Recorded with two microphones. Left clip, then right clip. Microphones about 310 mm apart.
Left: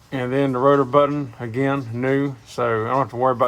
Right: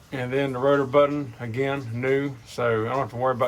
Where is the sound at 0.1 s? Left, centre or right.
Left.